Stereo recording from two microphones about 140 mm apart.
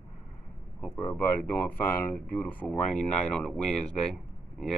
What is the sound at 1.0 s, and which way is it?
Speech, 20° left (ahead or behind).